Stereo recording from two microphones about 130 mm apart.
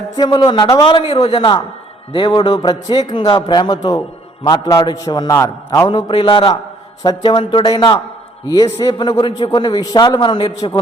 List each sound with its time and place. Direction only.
0.2 s a man's voice: 35° left (ahead or behind)
6.1 s a man's voice: 40° left (ahead or behind)